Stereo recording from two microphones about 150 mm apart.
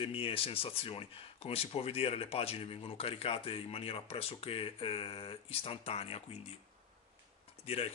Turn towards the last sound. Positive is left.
turn(degrees=40)  # may be behind; listen again after turning